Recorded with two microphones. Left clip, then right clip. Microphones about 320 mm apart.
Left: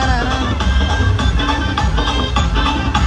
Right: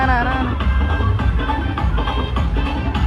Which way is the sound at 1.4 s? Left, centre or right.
Left.